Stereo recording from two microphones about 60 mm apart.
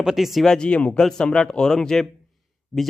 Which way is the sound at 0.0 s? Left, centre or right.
Centre.